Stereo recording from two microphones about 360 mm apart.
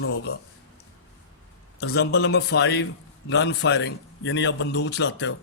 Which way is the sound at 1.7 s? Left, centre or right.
Left.